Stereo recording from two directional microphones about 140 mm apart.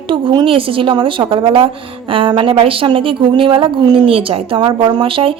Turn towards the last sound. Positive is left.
turn(degrees=-40)  # may be behind; listen again after turning